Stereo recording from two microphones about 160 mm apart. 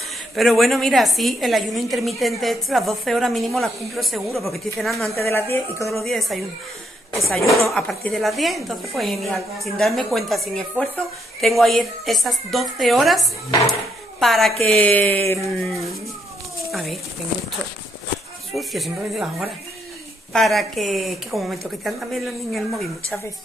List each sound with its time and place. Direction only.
0.4 s a woman's voice: centre (ahead or behind)
5.2 s a woman's voice: 15° left (ahead or behind)
6.0 s a woman's voice: centre (ahead or behind)
15.6 s a woman's voice: centre (ahead or behind)
18.5 s a woman's voice: centre (ahead or behind)
20.3 s a woman's voice: centre (ahead or behind)